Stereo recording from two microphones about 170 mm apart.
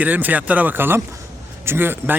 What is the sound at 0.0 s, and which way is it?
Speech, 10° right (ahead or behind).